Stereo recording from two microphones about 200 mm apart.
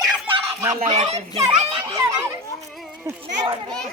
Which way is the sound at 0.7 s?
35° right (ahead or behind).